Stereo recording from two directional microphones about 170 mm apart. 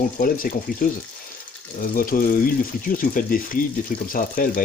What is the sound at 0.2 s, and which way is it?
Speech, 55° left (ahead or behind).